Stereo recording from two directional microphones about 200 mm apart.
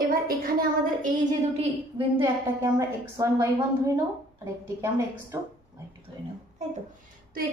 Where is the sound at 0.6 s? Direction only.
40° right (ahead or behind).